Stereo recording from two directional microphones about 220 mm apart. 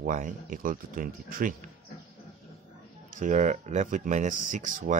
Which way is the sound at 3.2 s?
35° right (ahead or behind).